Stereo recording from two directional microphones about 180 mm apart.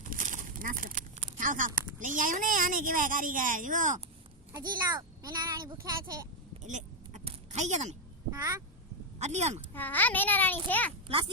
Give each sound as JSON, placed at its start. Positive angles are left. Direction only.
{"t": 0.0, "sound": "speech", "side_deg": -45}
{"t": 4.5, "sound": "a child's voice", "side_deg": -20}
{"t": 6.6, "sound": "a sound", "side_deg": -40}
{"t": 8.3, "sound": "a child's voice", "side_deg": -20}
{"t": 9.1, "sound": "speech", "side_deg": -40}
{"t": 9.7, "sound": "a child's voice", "side_deg": 10}